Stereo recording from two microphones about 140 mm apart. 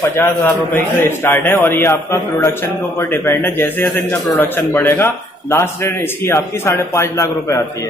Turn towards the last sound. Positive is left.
turn(degrees=20)  # may be behind; listen again after turning